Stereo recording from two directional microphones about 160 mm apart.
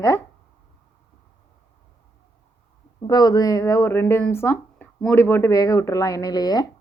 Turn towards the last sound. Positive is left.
turn(degrees=25)  # may be behind; listen again after turning